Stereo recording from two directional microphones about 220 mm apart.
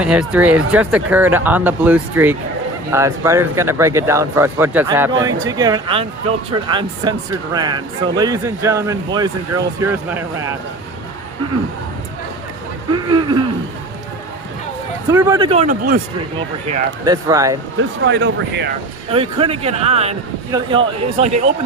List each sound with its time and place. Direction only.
0.0 s speech: 5° right (ahead or behind)
12.9 s a sound: 20° right (ahead or behind)
15.1 s speech: 15° right (ahead or behind); by 16.0 s 40° right (ahead or behind)
17.1 s speech: 15° right (ahead or behind)
17.7 s speech: 55° right (ahead or behind)
19.1 s speech: 25° right (ahead or behind)